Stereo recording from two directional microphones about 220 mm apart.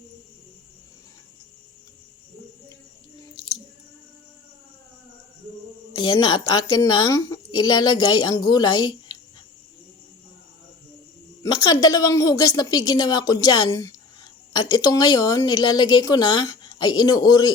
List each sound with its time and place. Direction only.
5.9 s a woman's voice: 20° left (ahead or behind)
11.4 s a woman's voice: 20° left (ahead or behind)